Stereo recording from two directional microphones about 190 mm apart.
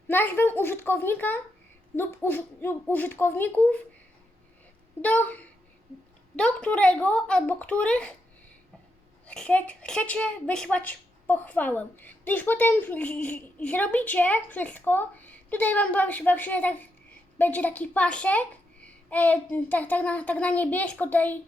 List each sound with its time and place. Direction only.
0.1 s a woman's voice: 10° left (ahead or behind)
5.0 s a woman's voice: 10° left (ahead or behind)
9.2 s a woman's voice: 5° left (ahead or behind)